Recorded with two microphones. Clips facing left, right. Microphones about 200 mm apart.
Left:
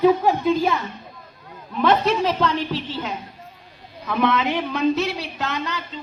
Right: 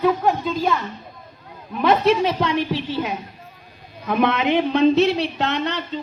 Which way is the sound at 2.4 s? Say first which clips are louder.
Right 1 dB; 10° right (ahead or behind).